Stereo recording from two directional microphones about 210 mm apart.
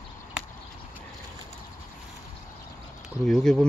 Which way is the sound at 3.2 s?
Centre (ahead or behind).